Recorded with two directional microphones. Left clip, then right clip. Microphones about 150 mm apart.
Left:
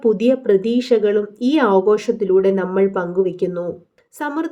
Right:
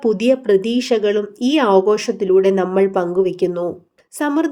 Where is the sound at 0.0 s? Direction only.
35° right (ahead or behind).